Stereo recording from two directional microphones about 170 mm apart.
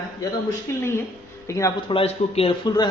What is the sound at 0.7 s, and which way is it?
A man's voice, 15° left (ahead or behind).